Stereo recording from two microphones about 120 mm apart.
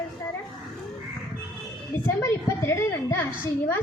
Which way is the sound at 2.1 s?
20° left (ahead or behind).